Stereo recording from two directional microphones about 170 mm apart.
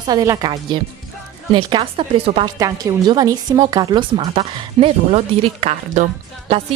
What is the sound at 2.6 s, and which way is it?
Speech, 20° right (ahead or behind).